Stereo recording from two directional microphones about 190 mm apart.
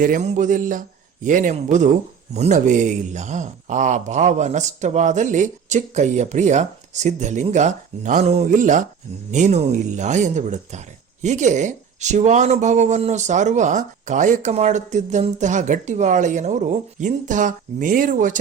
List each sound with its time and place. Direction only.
0.0 s a man's voice: 40° right (ahead or behind)